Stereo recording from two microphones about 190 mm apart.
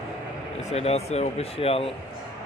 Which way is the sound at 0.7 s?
35° left (ahead or behind).